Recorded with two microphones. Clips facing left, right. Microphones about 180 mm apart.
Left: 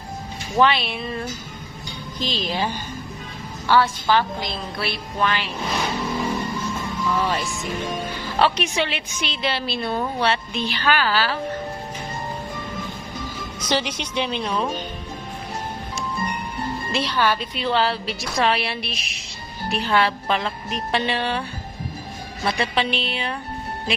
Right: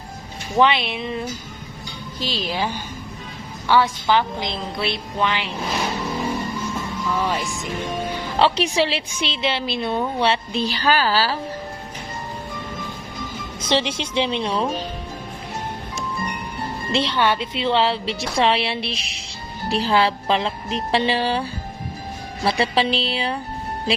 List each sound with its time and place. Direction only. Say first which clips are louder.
0.6 s a woman's voice: right 1 dB; 20° right (ahead or behind)
2.3 s a woman's voice: even; 10° right (ahead or behind)
3.7 s a woman's voice: right 1 dB; 15° right (ahead or behind)
7.1 s a woman's voice: even; 10° right (ahead or behind)
8.4 s a woman's voice: right 2 dB; 30° right (ahead or behind)
13.6 s a woman's voice: right 3 dB; 25° right (ahead or behind)
16.9 s a woman's voice: right 2 dB; 25° right (ahead or behind)
22.4 s a woman's voice: right 3 dB; 30° right (ahead or behind)